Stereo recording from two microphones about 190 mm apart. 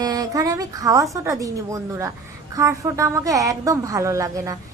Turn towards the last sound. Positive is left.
turn(degrees=-15)  # may be behind; listen again after turning